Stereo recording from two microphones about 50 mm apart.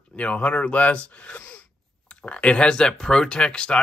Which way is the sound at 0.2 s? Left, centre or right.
Left.